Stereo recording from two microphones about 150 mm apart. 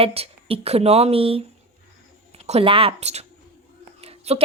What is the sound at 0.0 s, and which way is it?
Speech, 40° right (ahead or behind).